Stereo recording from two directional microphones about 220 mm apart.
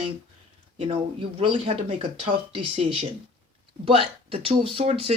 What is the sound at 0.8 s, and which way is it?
Speech, 25° right (ahead or behind).